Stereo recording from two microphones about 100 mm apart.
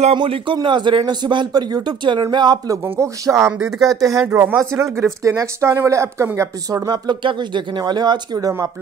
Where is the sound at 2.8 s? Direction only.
30° right (ahead or behind).